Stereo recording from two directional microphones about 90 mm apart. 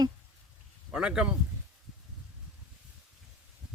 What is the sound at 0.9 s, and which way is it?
Speech, 10° right (ahead or behind).